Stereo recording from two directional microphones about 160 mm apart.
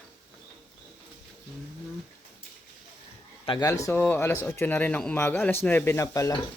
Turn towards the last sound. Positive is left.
turn(degrees=20)  # may be behind; listen again after turning